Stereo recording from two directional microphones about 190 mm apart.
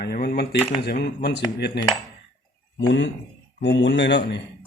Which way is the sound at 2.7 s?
75° left (ahead or behind).